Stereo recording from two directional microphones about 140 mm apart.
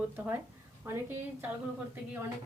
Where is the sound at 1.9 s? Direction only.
15° right (ahead or behind).